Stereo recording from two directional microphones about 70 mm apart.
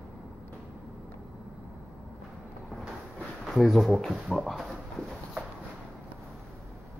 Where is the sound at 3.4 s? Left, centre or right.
Centre.